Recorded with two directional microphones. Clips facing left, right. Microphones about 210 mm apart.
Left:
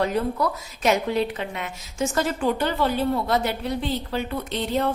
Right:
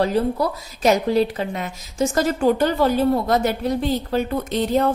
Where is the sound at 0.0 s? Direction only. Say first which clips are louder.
Right 4 dB; 35° right (ahead or behind).